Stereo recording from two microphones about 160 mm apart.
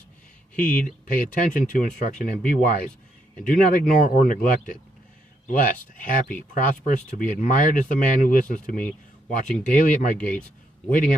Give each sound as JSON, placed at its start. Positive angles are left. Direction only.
{"t": 0.6, "sound": "speech", "side_deg": 60}